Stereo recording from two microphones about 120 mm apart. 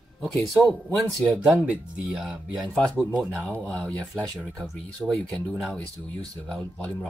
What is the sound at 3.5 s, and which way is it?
Speech, 10° left (ahead or behind).